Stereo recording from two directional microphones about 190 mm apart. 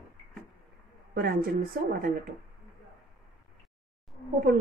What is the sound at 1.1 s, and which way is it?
Speech, 55° right (ahead or behind).